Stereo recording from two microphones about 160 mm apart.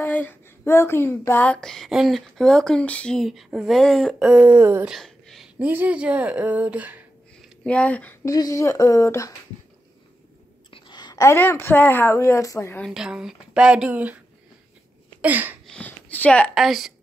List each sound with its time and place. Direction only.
0.0 s speech: 10° left (ahead or behind); by 4.9 s 15° right (ahead or behind)
4.9 s speech: centre (ahead or behind)
7.6 s speech: 10° left (ahead or behind)
8.3 s speech: 20° left (ahead or behind)
10.7 s a woman's voice: 30° left (ahead or behind)
12.8 s speech: 5° right (ahead or behind)
15.2 s a sound: 10° right (ahead or behind)
15.7 s speech: 10° left (ahead or behind)